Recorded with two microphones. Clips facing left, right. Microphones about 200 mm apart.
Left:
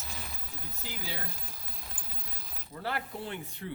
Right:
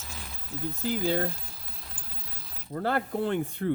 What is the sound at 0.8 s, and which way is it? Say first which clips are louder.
Speech: right 15 dB; 55° right (ahead or behind).